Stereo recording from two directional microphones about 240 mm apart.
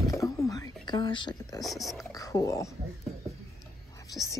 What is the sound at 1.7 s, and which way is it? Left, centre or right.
Speech, centre.